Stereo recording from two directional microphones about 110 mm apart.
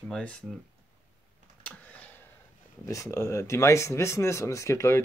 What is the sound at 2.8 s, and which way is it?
Speech, 30° left (ahead or behind).